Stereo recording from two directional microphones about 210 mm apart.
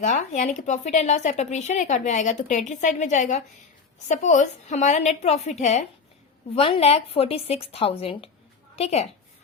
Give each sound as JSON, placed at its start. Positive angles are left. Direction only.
{"t": 0.0, "sound": "a woman's voice", "side_deg": 35}